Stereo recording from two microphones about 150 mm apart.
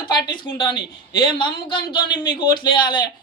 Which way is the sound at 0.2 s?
35° left (ahead or behind).